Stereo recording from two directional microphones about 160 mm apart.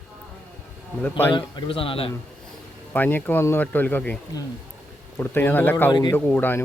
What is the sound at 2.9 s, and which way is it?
Speech, 10° left (ahead or behind).